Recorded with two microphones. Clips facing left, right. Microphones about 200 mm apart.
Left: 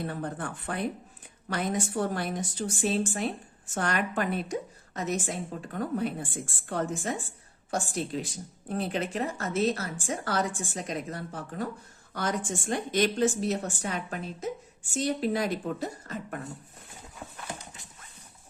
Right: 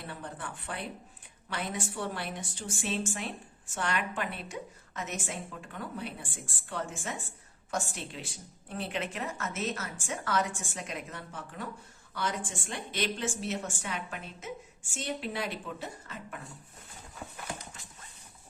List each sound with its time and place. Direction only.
0.1 s a woman's voice: 45° left (ahead or behind)